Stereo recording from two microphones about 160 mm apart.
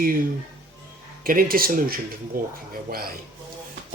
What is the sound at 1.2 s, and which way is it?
Speech, 65° right (ahead or behind).